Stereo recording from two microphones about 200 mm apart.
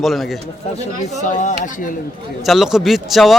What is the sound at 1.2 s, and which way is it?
Speech, 40° left (ahead or behind).